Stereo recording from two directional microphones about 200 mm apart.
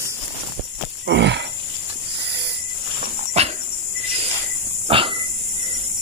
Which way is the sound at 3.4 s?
30° right (ahead or behind).